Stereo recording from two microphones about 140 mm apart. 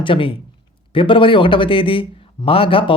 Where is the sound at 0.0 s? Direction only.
40° left (ahead or behind).